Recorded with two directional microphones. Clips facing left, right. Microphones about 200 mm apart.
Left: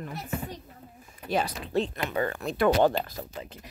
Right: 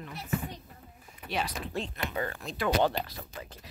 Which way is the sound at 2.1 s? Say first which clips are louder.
Left 7 dB; 60° left (ahead or behind).